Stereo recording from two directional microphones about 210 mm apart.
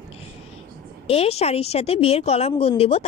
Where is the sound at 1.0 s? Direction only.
30° left (ahead or behind).